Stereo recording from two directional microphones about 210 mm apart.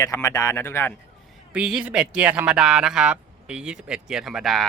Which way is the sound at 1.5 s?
5° right (ahead or behind).